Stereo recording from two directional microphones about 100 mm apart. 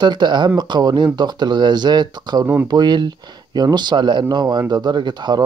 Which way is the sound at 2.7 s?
50° right (ahead or behind).